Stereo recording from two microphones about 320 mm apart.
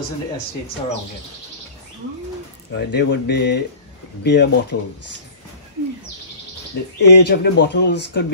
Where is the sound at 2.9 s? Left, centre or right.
Left.